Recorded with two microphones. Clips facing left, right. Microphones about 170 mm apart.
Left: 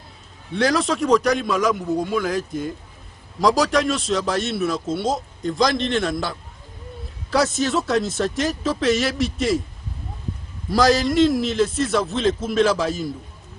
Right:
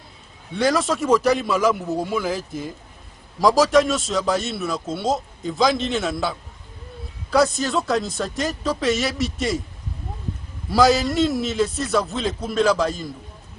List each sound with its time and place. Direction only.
0.5 s a man's voice: centre (ahead or behind)
10.7 s a man's voice: centre (ahead or behind)